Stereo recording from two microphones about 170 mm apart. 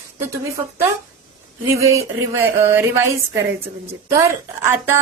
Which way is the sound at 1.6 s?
15° right (ahead or behind).